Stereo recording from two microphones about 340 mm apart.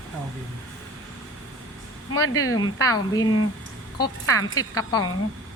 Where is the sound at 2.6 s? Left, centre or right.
Centre.